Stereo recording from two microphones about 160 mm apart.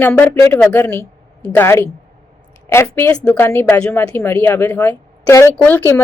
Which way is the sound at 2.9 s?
10° left (ahead or behind).